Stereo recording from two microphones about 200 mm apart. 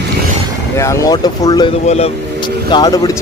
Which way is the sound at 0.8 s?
15° left (ahead or behind).